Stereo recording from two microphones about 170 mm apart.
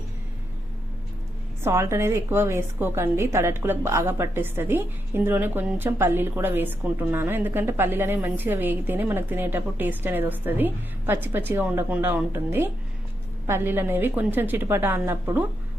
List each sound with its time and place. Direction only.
1.6 s a woman's voice: 15° right (ahead or behind)